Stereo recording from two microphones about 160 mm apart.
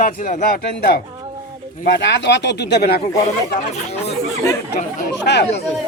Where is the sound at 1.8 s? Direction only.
90° left.